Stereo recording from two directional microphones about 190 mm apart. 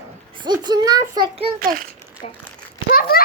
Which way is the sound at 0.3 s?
25° right (ahead or behind).